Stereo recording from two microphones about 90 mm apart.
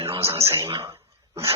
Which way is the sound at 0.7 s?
35° right (ahead or behind).